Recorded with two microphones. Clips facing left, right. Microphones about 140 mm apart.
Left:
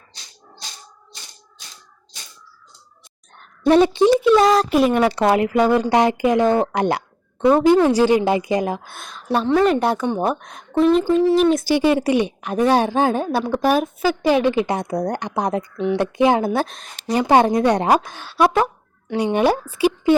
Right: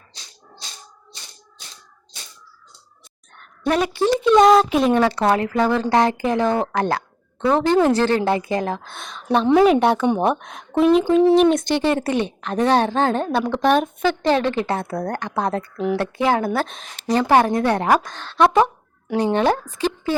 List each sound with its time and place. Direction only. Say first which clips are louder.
3.7 s a woman's voice: left 6 dB; 30° left (ahead or behind)
4.0 s speech: left 1 dB; 10° left (ahead or behind)
5.0 s a woman's voice: left 2 dB; 15° left (ahead or behind)
16.6 s speech: right 2 dB; centre (ahead or behind)
17.2 s speech: left 2 dB; 20° left (ahead or behind)